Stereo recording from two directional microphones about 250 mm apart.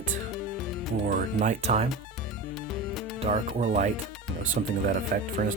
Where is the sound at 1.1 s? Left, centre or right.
Right.